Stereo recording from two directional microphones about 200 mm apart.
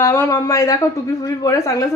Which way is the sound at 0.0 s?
15° left (ahead or behind).